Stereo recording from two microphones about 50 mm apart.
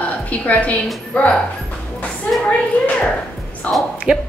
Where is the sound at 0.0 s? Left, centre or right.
Left.